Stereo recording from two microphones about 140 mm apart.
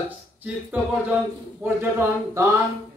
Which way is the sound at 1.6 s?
15° right (ahead or behind).